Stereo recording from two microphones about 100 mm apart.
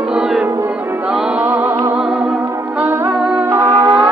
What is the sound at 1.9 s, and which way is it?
Music, 10° right (ahead or behind).